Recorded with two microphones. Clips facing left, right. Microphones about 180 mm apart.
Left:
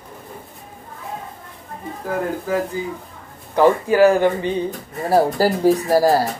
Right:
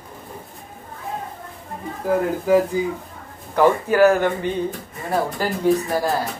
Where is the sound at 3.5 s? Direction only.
15° left (ahead or behind).